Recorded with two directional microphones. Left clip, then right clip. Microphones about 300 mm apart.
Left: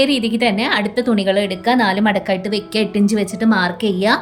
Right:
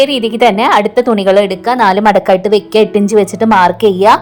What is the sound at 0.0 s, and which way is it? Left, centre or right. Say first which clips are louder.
A woman's voice: right 7 dB; centre.